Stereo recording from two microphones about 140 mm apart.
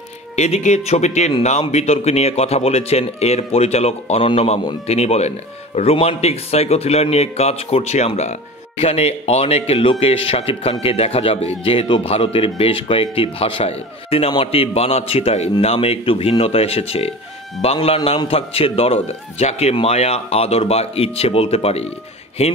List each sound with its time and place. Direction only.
0.4 s a man's voice: 50° left (ahead or behind)